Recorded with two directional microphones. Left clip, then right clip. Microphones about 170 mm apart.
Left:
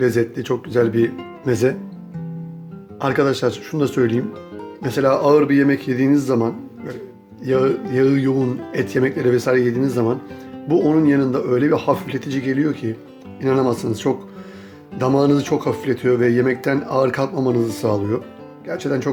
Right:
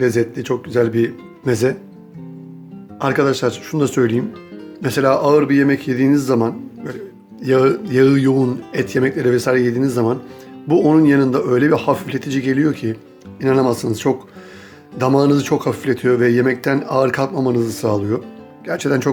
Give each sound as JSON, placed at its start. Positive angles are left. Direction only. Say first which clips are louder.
{"t": 0.0, "sound": "speech", "louder": "right 1 dB", "side_deg": 0}
{"t": 3.0, "sound": "speech", "louder": "right 2 dB", "side_deg": -5}
{"t": 18.6, "sound": "speech", "louder": "right 4 dB", "side_deg": -20}